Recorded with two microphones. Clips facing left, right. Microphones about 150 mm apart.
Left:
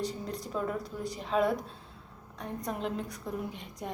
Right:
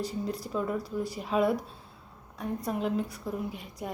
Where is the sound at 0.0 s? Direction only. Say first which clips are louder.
Right 2 dB; 5° right (ahead or behind).